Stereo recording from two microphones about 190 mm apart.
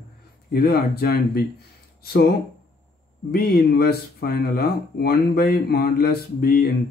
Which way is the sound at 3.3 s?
55° left (ahead or behind).